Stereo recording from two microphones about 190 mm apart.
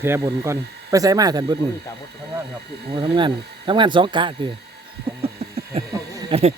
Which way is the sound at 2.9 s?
25° right (ahead or behind).